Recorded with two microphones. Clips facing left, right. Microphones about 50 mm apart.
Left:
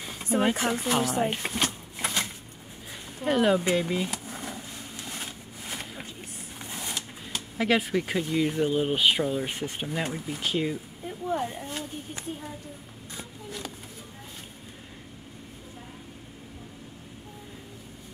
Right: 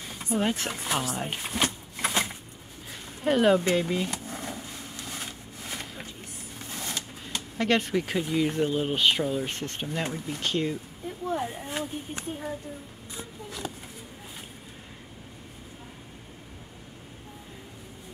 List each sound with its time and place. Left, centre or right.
0.4 s speech: centre
1.5 s a sound: centre
3.2 s speech: centre
3.6 s a sound: centre
6.6 s speech: centre
11.6 s speech: centre